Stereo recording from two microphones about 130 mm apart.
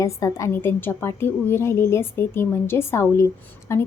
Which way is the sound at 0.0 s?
25° left (ahead or behind).